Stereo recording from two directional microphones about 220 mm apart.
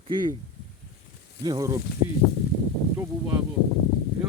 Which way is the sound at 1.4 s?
15° right (ahead or behind).